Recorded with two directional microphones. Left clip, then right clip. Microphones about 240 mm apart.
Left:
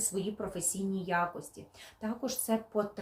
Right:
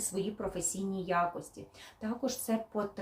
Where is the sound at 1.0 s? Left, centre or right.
Centre.